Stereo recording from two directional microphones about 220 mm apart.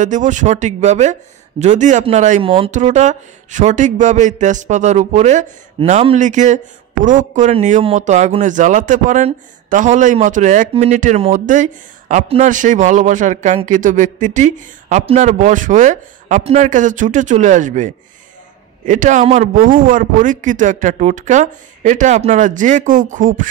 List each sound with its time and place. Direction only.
0.0 s speech: 35° right (ahead or behind)